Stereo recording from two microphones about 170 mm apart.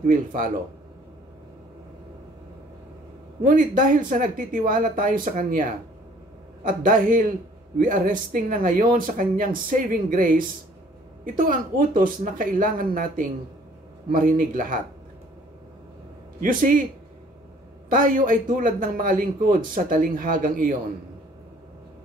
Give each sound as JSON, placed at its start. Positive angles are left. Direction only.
{"t": 0.0, "sound": "a man's voice", "side_deg": -50}
{"t": 3.4, "sound": "a man's voice", "side_deg": -50}
{"t": 16.3, "sound": "a man's voice", "side_deg": -55}
{"t": 17.8, "sound": "a man's voice", "side_deg": -55}